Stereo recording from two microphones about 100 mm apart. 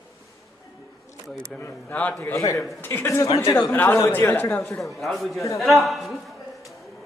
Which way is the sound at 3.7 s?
20° left (ahead or behind).